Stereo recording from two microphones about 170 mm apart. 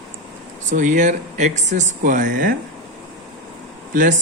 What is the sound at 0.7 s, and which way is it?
Speech, 45° right (ahead or behind).